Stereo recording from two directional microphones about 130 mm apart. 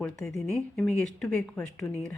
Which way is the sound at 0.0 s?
Centre (ahead or behind).